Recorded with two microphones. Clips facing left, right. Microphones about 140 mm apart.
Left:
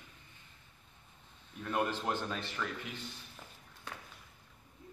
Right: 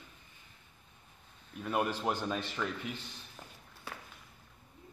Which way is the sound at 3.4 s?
15° right (ahead or behind).